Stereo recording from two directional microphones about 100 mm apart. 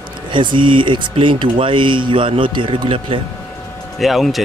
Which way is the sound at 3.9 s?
Centre (ahead or behind).